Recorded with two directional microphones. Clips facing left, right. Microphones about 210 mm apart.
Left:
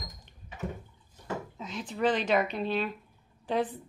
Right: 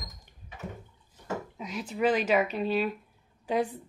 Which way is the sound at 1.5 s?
10° right (ahead or behind).